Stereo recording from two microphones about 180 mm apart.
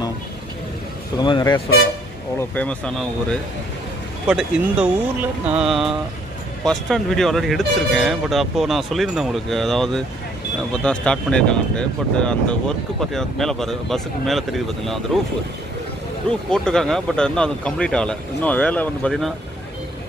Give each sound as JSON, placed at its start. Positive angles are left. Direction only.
{"t": 1.1, "sound": "speech", "side_deg": 25}
{"t": 2.5, "sound": "speech", "side_deg": 5}
{"t": 4.3, "sound": "speech", "side_deg": -5}